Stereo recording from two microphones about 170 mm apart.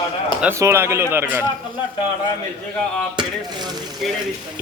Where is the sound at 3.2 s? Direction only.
25° right (ahead or behind).